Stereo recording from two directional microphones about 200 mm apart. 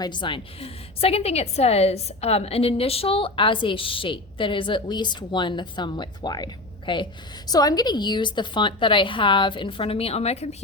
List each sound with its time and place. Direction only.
0.0 s a woman's voice: 20° left (ahead or behind)